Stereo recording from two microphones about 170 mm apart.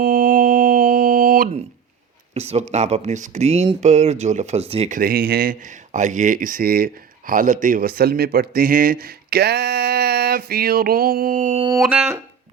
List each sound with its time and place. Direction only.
0.0 s mantra: 55° right (ahead or behind)
2.3 s speech: 40° right (ahead or behind)
4.9 s speech: 60° right (ahead or behind)
11.8 s a sound: 5° right (ahead or behind)